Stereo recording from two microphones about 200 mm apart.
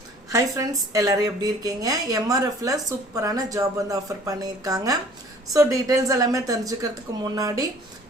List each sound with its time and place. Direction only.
0.3 s a woman's voice: 15° right (ahead or behind)